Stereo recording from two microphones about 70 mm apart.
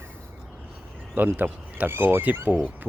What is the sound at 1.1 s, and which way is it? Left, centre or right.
Speech, right.